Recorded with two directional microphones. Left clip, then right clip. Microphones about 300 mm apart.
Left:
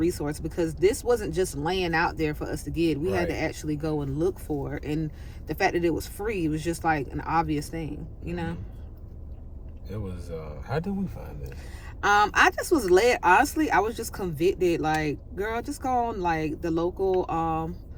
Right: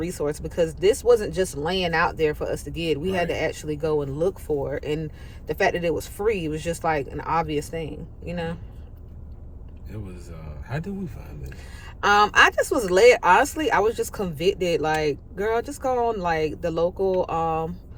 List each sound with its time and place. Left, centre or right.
0.0 s speech: centre
10.7 s speech: centre
11.9 s speech: centre